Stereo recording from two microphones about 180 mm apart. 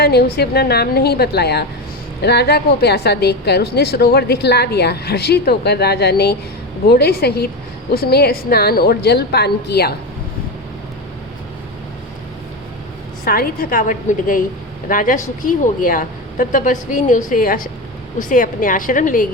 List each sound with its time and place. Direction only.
0.0 s a woman's voice: 60° left (ahead or behind)
13.2 s a woman's voice: 55° left (ahead or behind)